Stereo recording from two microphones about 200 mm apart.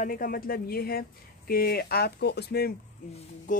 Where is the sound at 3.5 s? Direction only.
40° left (ahead or behind).